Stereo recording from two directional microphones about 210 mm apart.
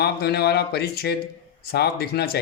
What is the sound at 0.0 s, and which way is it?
Speech, 50° left (ahead or behind).